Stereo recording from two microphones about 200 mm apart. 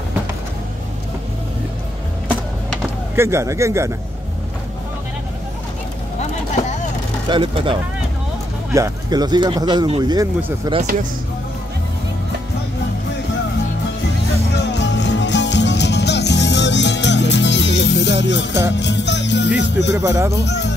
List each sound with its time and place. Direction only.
3.2 s a man's voice: 15° right (ahead or behind)
7.2 s speech: 25° right (ahead or behind)
10.8 s speech: 40° right (ahead or behind)
14.5 s music: 60° left (ahead or behind)
19.6 s speech: 60° left (ahead or behind)
20.0 s a man's voice: 15° right (ahead or behind)